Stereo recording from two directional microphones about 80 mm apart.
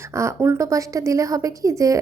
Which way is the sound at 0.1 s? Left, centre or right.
Right.